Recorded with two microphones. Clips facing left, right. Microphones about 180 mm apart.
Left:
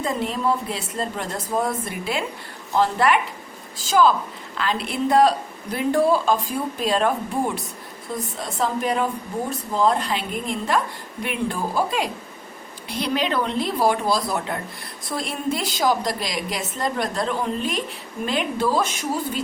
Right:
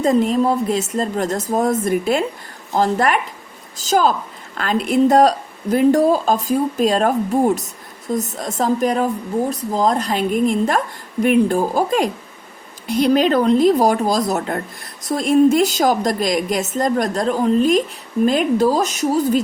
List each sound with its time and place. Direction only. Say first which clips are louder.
0.0 s a woman's voice: right 8 dB; 40° right (ahead or behind)